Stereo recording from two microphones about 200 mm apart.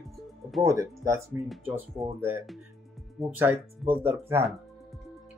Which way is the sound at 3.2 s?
10° right (ahead or behind).